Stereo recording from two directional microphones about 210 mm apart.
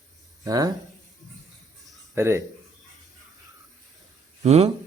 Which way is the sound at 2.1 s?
15° right (ahead or behind).